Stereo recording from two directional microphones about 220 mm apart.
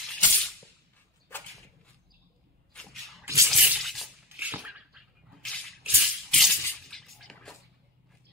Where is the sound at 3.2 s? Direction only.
15° right (ahead or behind).